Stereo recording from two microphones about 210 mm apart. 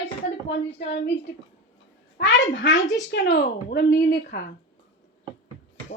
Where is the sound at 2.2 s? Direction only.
60° left (ahead or behind).